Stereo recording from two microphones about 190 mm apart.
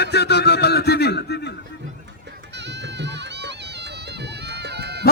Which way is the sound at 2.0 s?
65° right (ahead or behind).